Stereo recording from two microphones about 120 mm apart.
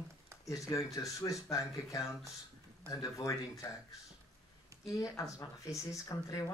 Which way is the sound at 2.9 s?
30° left (ahead or behind).